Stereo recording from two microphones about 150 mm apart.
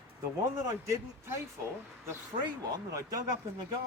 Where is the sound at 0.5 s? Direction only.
20° right (ahead or behind).